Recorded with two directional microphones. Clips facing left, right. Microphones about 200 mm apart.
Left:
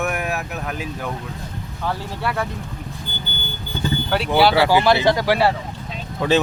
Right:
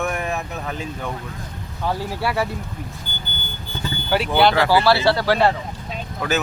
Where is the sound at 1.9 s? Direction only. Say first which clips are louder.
Right 2 dB; 10° right (ahead or behind).